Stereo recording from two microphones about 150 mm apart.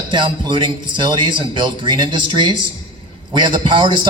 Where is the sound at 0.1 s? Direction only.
30° right (ahead or behind).